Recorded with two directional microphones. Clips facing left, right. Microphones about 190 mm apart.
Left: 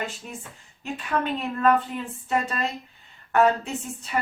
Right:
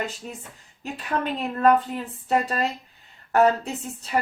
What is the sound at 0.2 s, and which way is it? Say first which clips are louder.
Speech: right 1 dB; 35° right (ahead or behind).